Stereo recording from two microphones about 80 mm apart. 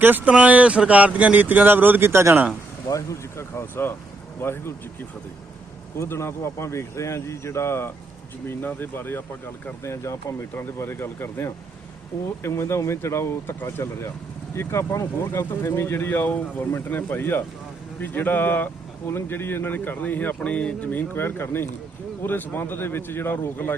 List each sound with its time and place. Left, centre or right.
0.0 s speech: right
2.9 s speech: left
6.0 s speech: left